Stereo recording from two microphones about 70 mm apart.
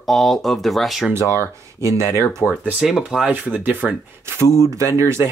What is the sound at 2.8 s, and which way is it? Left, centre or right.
Speech, centre.